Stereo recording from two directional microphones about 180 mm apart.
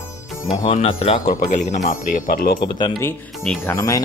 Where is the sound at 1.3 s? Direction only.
45° left (ahead or behind).